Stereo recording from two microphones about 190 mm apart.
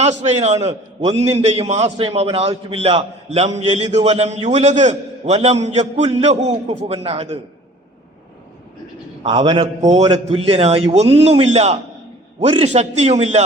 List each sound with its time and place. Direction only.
0.0 s a man's voice: 35° right (ahead or behind)
9.3 s a man's voice: 25° right (ahead or behind)